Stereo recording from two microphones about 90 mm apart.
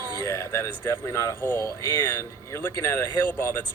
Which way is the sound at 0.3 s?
30° left (ahead or behind).